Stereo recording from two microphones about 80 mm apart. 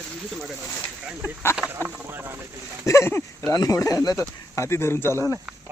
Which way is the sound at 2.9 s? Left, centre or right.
Left.